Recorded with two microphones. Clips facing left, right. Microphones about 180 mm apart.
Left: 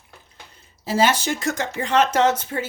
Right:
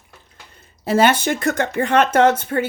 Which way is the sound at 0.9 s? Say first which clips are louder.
Right 4 dB; 55° right (ahead or behind).